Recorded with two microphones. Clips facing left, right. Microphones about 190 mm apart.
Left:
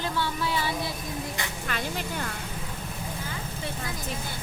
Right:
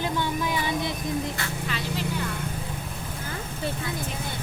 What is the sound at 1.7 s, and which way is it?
Speech, 50° left (ahead or behind).